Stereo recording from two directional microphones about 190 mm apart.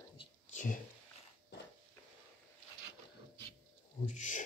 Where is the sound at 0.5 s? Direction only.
40° left (ahead or behind).